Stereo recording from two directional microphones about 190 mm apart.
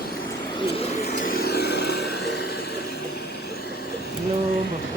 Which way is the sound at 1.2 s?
50° left (ahead or behind).